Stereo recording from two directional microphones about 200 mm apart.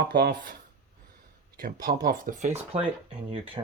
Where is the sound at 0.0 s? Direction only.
50° right (ahead or behind).